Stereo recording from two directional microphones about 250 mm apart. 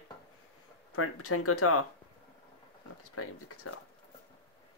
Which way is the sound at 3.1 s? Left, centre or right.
Left.